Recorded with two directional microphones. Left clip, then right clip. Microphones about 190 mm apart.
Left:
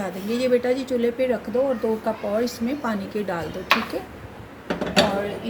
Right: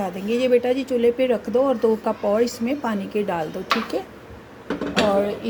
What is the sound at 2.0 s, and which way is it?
Speech, 30° right (ahead or behind).